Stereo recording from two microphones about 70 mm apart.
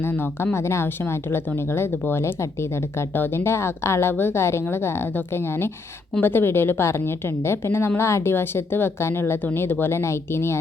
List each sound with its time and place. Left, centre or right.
0.0 s a woman's voice: left
0.5 s a woman's voice: left